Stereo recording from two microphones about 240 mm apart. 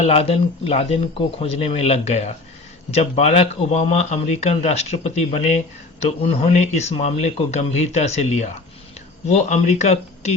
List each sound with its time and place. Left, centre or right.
0.0 s speech: left